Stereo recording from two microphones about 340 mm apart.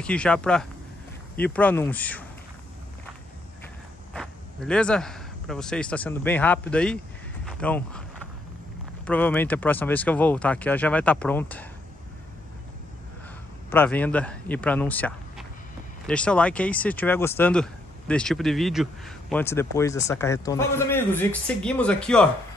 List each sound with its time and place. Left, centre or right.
0.0 s speech: centre
4.1 s speech: centre
7.4 s a sound: centre
9.0 s speech: centre
13.7 s speech: centre